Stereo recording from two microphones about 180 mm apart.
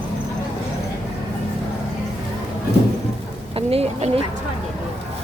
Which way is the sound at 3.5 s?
35° right (ahead or behind).